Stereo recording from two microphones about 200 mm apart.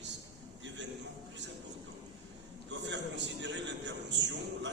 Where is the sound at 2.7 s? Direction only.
60° right (ahead or behind).